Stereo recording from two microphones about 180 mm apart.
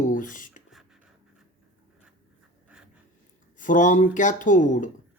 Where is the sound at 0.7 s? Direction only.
Centre (ahead or behind).